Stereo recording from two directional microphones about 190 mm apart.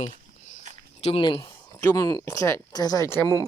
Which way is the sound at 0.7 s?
40° right (ahead or behind).